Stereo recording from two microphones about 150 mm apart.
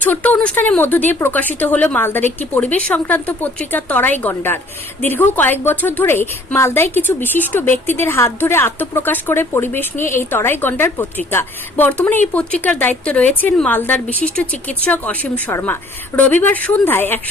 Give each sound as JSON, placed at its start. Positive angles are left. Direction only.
{"t": 0.0, "sound": "speech", "side_deg": 10}